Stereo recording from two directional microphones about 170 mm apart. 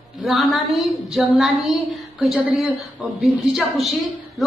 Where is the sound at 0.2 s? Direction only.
Centre (ahead or behind).